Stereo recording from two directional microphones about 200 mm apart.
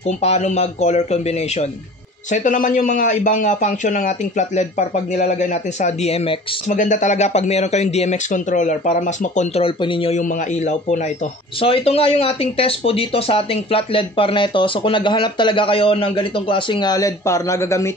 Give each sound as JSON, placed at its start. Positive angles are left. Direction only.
{"t": 0.2, "sound": "speech", "side_deg": 35}
{"t": 9.8, "sound": "speech", "side_deg": 25}